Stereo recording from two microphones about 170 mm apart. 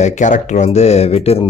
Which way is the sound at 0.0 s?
45° left (ahead or behind).